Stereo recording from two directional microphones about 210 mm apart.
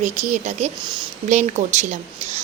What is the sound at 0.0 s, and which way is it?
Speech, 35° right (ahead or behind).